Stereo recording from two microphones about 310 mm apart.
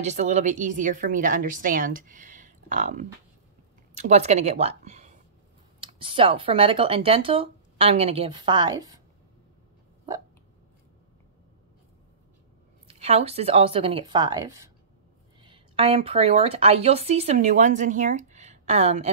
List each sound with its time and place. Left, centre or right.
0.0 s a woman's voice: right
12.8 s speech: centre